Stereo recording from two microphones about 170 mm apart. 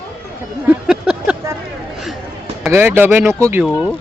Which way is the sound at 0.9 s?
5° right (ahead or behind).